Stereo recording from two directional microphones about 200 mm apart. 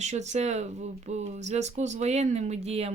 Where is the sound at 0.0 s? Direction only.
35° right (ahead or behind).